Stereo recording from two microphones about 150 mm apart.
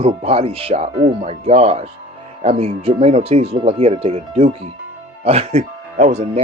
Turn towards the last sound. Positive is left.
turn(degrees=-45)  # may be behind; listen again after turning